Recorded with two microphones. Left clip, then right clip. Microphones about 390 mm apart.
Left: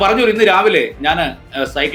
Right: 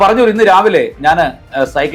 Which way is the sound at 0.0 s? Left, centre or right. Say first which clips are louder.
Right 3 dB; right.